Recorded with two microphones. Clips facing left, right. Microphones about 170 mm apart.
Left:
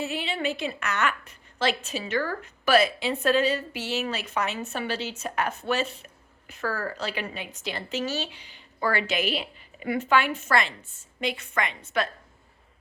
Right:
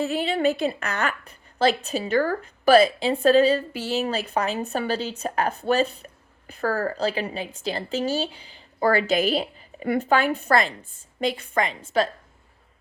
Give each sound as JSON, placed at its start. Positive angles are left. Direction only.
{"t": 0.0, "sound": "a woman's voice", "side_deg": -40}